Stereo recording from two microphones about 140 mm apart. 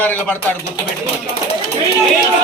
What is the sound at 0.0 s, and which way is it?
Speech, 10° left (ahead or behind).